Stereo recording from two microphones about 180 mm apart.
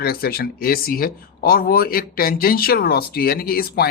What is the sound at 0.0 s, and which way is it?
Speech, 55° left (ahead or behind).